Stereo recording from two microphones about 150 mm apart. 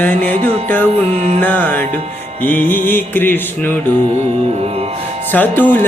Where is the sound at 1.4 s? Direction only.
10° left (ahead or behind).